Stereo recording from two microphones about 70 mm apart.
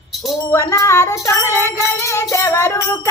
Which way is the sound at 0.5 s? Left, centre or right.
Left.